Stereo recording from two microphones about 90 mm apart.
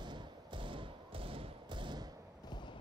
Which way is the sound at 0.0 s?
60° right (ahead or behind).